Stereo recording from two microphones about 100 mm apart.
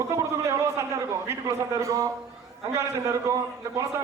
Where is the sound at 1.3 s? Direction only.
30° right (ahead or behind).